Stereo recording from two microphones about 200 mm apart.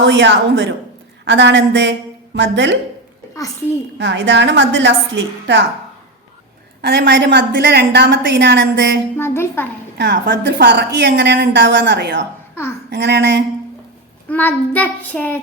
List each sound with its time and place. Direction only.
0.0 s a woman's voice: 65° right (ahead or behind)
3.9 s a woman's voice: 60° right (ahead or behind)
6.8 s a woman's voice: 55° right (ahead or behind)
9.1 s child singing: 10° left (ahead or behind)
10.0 s a woman's voice: 60° right (ahead or behind)
14.3 s child singing: 10° left (ahead or behind)